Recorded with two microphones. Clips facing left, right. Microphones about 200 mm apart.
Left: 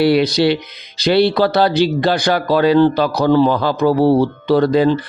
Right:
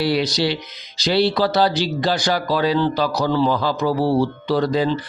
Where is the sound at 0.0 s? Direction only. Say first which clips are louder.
Left 7 dB; 55° left (ahead or behind).